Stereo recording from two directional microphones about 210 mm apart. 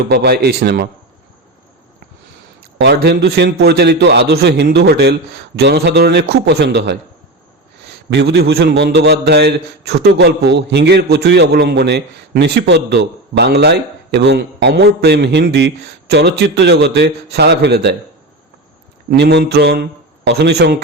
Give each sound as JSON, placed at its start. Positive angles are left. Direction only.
{"t": 0.1, "sound": "a man's voice", "side_deg": -50}
{"t": 2.6, "sound": "a man's voice", "side_deg": -50}
{"t": 8.1, "sound": "a man's voice", "side_deg": -50}
{"t": 19.1, "sound": "a man's voice", "side_deg": -55}